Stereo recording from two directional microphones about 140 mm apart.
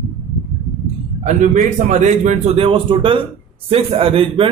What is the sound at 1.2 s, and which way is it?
A man's voice, 60° right (ahead or behind).